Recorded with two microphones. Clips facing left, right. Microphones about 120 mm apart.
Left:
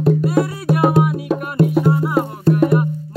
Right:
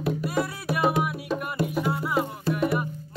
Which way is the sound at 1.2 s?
50° left (ahead or behind).